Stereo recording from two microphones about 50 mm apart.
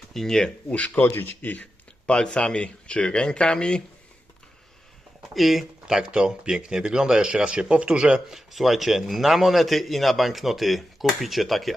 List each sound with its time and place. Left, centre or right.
0.1 s speech: centre
0.7 s speech: left
1.1 s speech: left
2.0 s speech: centre
5.3 s speech: centre
6.1 s speech: centre
8.3 s a man's voice: centre